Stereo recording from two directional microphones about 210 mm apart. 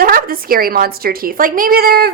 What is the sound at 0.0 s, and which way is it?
A woman's voice, 45° right (ahead or behind).